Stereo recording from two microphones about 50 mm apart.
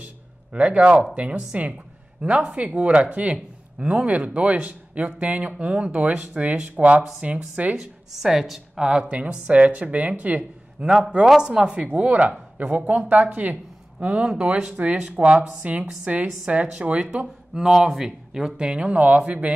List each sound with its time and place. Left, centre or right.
0.0 s a sound: right
1.1 s a woman's voice: right
5.9 s a woman's voice: right
8.2 s a woman's voice: centre; by 10.4 s right
10.8 s a woman's voice: centre; by 13.6 s right
13.9 s a woman's voice: centre
17.2 s speech: centre